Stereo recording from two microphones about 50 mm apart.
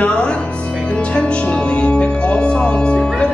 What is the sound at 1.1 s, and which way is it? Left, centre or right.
Music, left.